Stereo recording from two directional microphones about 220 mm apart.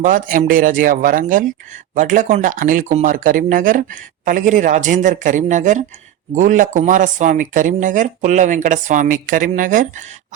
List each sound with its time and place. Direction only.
0.0 s speech: 40° right (ahead or behind)